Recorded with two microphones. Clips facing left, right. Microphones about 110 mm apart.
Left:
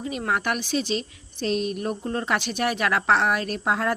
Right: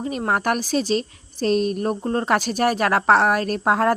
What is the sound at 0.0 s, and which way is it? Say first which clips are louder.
A woman's voice: right 4 dB; 40° right (ahead or behind).